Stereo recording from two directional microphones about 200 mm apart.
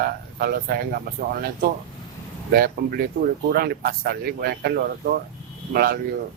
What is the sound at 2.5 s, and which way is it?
A woman's voice, 50° right (ahead or behind).